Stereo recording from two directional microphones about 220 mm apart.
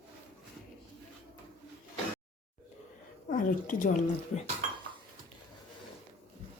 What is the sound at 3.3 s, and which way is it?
Speech, 35° left (ahead or behind).